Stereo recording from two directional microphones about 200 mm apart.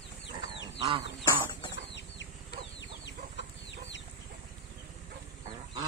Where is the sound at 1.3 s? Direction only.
15° left (ahead or behind).